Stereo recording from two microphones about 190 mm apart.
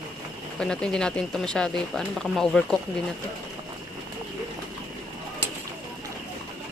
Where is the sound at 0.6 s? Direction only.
5° left (ahead or behind).